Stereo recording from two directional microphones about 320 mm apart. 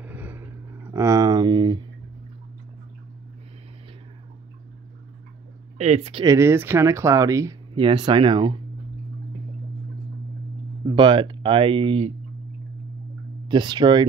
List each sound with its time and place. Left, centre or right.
0.0 s a sound: centre
5.8 s speech: centre
10.9 s speech: centre
13.5 s speech: centre